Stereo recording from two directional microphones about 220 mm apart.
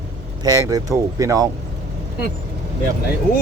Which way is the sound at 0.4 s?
15° right (ahead or behind).